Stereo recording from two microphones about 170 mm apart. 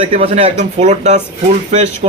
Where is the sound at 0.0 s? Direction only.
35° right (ahead or behind).